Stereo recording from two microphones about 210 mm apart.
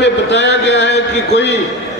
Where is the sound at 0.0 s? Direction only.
55° left (ahead or behind).